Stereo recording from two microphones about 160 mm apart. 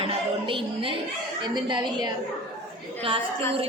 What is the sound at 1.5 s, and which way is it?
Speech, 30° right (ahead or behind).